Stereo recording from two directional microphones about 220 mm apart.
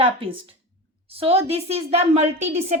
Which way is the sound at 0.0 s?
25° right (ahead or behind).